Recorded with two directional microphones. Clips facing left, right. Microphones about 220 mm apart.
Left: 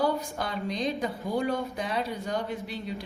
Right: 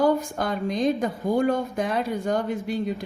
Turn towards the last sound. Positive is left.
turn(degrees=-50)  # may be behind; listen again after turning